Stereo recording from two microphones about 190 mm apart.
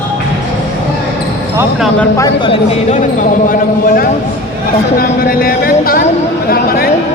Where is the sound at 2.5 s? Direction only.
40° left (ahead or behind).